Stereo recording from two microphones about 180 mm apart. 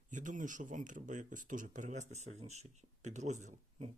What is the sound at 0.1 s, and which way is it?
Speech, 45° right (ahead or behind).